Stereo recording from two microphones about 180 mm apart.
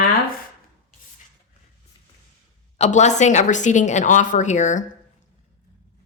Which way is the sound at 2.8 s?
40° left (ahead or behind).